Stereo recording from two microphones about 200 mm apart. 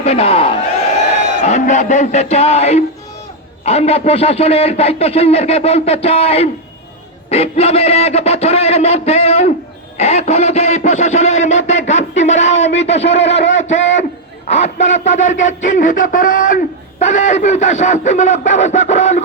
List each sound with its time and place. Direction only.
0.0 s speech: 30° left (ahead or behind)
10.0 s a sound: 35° left (ahead or behind)
14.4 s speech: 35° left (ahead or behind)